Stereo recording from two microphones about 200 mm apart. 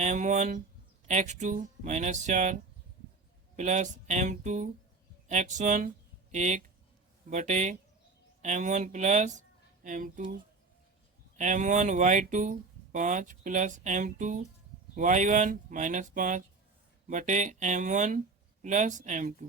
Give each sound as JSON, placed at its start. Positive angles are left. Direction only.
{"t": 0.0, "sound": "speech", "side_deg": -35}
{"t": 11.3, "sound": "speech", "side_deg": -40}